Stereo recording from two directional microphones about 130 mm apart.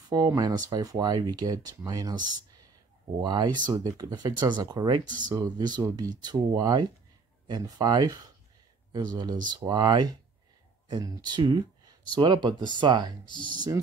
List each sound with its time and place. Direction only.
0.1 s speech: 30° right (ahead or behind)